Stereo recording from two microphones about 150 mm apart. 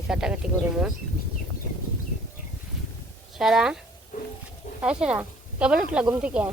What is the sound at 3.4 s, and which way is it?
Speech, 5° right (ahead or behind).